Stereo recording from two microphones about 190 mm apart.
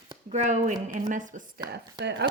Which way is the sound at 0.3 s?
40° right (ahead or behind).